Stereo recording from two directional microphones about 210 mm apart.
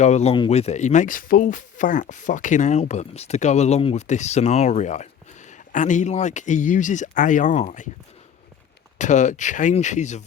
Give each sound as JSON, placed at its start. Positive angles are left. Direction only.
{"t": 0.0, "sound": "speech", "side_deg": 30}
{"t": 9.0, "sound": "speech", "side_deg": 35}